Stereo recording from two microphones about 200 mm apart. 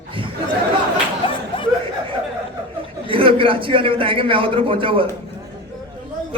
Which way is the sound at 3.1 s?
25° right (ahead or behind).